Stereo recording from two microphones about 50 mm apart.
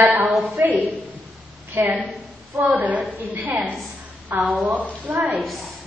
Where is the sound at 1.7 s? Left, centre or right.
Right.